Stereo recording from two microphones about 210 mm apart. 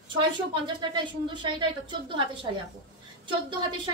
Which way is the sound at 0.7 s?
20° right (ahead or behind).